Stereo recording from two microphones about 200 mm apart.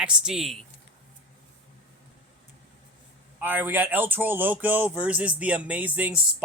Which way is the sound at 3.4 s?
10° right (ahead or behind).